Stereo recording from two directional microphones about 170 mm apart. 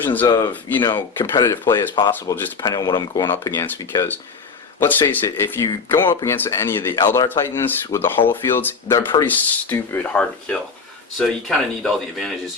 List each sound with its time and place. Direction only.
0.0 s speech: 10° left (ahead or behind)